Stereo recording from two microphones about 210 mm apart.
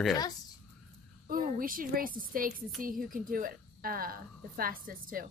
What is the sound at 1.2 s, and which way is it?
A woman's voice, 40° right (ahead or behind).